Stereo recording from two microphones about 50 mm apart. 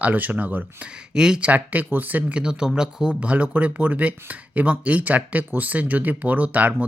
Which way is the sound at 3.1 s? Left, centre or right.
Right.